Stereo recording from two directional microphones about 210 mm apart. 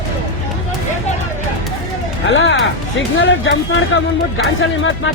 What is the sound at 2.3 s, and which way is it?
Speech, 65° left (ahead or behind).